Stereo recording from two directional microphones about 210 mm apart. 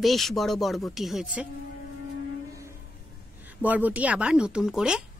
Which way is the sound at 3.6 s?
10° right (ahead or behind).